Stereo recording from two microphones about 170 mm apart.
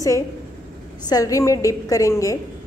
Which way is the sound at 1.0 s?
20° left (ahead or behind).